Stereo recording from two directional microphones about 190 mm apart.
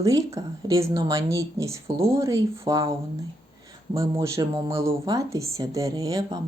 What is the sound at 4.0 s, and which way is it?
Speech, 15° right (ahead or behind).